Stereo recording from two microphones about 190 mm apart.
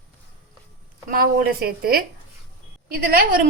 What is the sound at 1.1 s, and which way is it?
A woman's voice, 50° right (ahead or behind).